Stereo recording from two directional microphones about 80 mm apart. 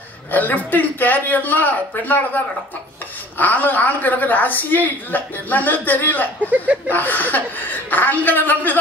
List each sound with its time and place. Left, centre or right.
0.3 s a woman's voice: left